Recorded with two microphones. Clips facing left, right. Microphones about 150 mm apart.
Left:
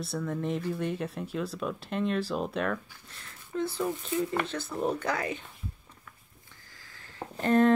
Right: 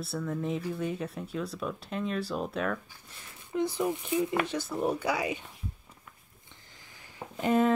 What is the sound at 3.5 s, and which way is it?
Speech, 15° right (ahead or behind).